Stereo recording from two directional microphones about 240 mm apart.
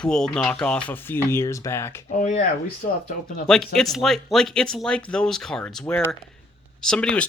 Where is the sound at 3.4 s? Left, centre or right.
Centre.